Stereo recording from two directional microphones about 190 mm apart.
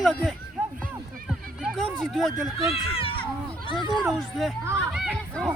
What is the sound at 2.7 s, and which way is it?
Speech, 30° left (ahead or behind).